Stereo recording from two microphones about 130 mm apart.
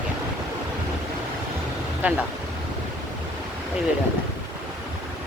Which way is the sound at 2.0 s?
10° right (ahead or behind).